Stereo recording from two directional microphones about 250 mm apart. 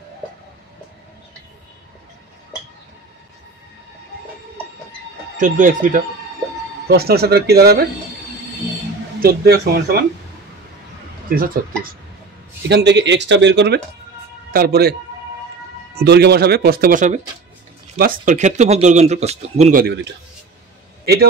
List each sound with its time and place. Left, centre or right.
5.4 s speech: right
9.2 s speech: right
11.2 s speech: right
16.0 s speech: right
21.0 s a sound: right